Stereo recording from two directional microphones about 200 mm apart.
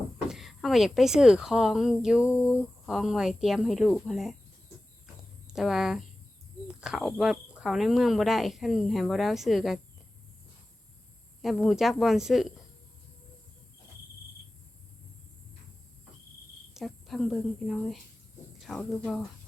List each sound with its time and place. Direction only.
0.3 s a woman's voice: centre (ahead or behind)
5.5 s a woman's voice: centre (ahead or behind)
11.4 s a woman's voice: centre (ahead or behind)
16.7 s a woman's voice: centre (ahead or behind)